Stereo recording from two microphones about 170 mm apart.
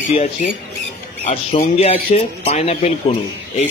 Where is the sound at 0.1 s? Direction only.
40° left (ahead or behind).